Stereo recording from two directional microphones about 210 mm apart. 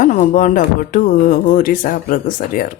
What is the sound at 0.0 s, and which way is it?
Speech, 40° left (ahead or behind).